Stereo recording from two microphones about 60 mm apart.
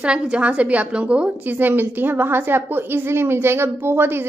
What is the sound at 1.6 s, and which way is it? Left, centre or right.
A woman's voice, right.